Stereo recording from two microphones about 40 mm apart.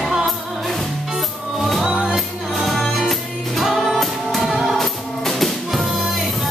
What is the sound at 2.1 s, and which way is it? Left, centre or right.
Music, centre.